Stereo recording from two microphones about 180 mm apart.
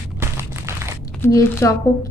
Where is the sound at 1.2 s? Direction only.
15° left (ahead or behind).